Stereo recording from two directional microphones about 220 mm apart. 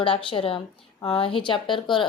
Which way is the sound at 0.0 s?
25° left (ahead or behind).